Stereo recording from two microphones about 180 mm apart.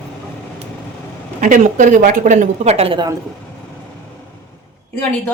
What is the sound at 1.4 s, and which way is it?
A woman's voice, 45° right (ahead or behind).